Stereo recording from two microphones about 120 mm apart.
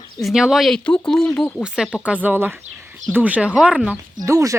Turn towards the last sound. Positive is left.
turn(degrees=-25)  # may be behind; listen again after turning